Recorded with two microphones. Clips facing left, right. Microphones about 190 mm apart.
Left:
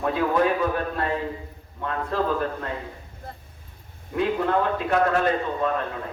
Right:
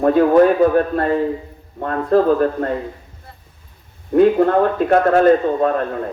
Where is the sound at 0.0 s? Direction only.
45° right (ahead or behind).